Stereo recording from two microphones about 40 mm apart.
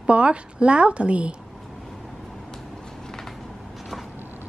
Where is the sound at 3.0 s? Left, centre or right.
Centre.